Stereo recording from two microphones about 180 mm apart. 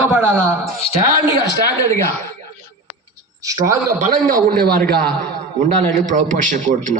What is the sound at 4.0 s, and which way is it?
Speech, 50° right (ahead or behind).